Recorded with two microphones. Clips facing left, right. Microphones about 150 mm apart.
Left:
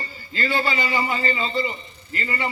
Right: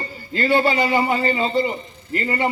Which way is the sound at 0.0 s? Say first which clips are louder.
Right 5 dB; 55° right (ahead or behind).